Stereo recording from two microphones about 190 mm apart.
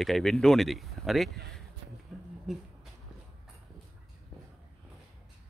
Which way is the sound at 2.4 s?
Centre (ahead or behind).